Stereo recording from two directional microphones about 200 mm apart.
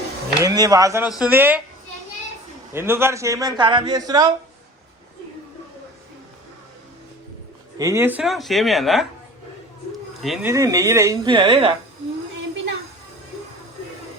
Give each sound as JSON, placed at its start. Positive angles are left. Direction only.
{"t": 0.3, "sound": "speech", "side_deg": -20}
{"t": 1.0, "sound": "speech", "side_deg": -5}
{"t": 2.7, "sound": "a man's voice", "side_deg": -10}
{"t": 7.8, "sound": "speech", "side_deg": -15}
{"t": 10.2, "sound": "speech", "side_deg": 0}
{"t": 10.4, "sound": "speech", "side_deg": -15}